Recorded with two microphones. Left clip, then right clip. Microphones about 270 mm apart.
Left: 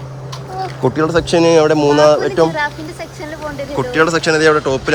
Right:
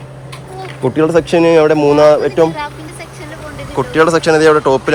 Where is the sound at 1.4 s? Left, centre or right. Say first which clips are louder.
Right 1 dB; centre.